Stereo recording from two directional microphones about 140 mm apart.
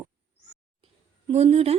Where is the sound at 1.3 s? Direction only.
50° right (ahead or behind).